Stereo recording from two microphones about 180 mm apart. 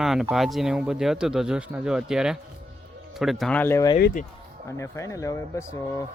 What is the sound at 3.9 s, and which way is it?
Speech, 55° left (ahead or behind).